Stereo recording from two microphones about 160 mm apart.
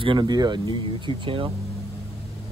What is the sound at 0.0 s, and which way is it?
Speech, 30° right (ahead or behind).